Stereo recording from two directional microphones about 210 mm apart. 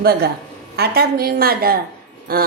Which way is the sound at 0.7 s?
50° right (ahead or behind).